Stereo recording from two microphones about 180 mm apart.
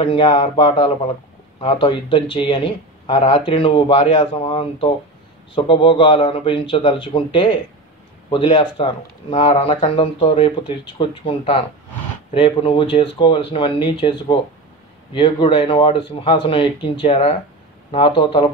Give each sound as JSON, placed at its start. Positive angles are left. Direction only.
{"t": 0.0, "sound": "speech", "side_deg": 30}